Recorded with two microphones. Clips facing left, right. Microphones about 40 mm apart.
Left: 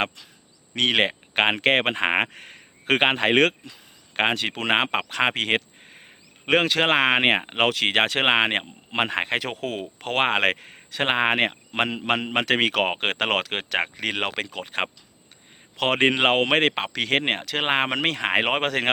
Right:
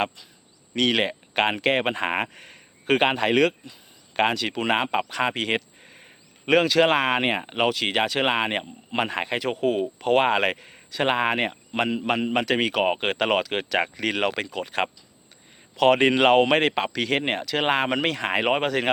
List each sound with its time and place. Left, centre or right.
0.8 s speech: left
1.5 s a man's voice: left
7.6 s a man's voice: left
9.4 s speech: left
10.0 s speech: left
10.2 s a man's voice: left
10.9 s a man's voice: left
11.8 s a man's voice: left
13.0 s a man's voice: left
13.8 s speech: left
18.4 s speech: left